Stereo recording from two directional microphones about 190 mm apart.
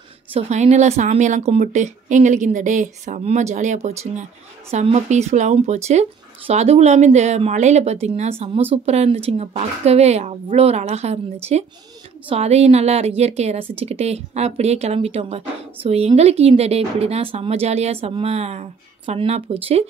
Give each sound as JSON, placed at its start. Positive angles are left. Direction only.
{"t": 0.3, "sound": "speech", "side_deg": -35}
{"t": 12.3, "sound": "speech", "side_deg": -35}